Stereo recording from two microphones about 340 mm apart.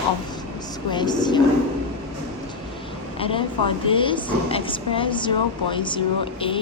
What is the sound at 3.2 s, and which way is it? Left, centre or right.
A woman's voice, centre.